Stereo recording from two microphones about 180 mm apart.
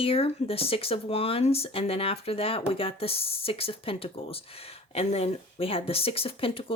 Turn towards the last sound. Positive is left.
turn(degrees=30)  # may be behind; listen again after turning